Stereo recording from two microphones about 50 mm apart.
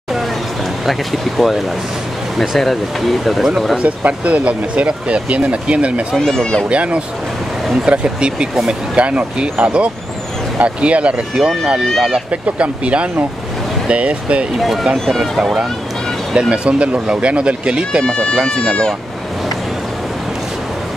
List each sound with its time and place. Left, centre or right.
0.8 s speech: centre
3.8 s speech: right
6.1 s speech: centre
6.7 s speech: right
12.3 s speech: right
14.6 s speech: centre
16.3 s speech: centre
18.0 s speech: centre